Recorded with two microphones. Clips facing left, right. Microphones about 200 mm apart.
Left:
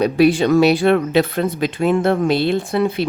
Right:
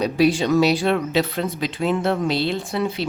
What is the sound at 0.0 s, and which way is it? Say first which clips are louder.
Speech: left 4 dB; 60° left (ahead or behind).